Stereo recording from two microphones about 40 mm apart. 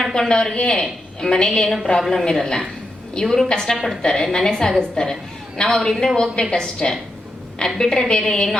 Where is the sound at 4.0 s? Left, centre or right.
Centre.